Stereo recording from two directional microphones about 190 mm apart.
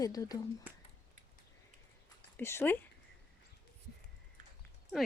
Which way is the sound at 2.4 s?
15° left (ahead or behind).